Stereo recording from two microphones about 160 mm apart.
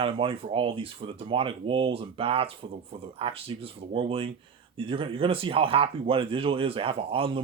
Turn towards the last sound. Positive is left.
turn(degrees=-35)  # may be behind; listen again after turning